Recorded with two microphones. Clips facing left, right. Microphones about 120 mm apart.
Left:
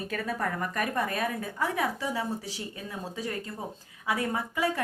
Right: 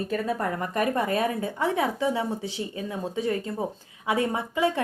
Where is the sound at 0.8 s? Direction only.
25° right (ahead or behind).